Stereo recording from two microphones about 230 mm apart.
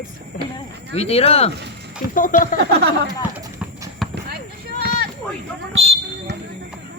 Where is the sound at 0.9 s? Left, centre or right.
Left.